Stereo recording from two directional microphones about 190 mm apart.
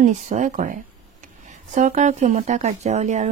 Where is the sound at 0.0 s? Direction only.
40° right (ahead or behind).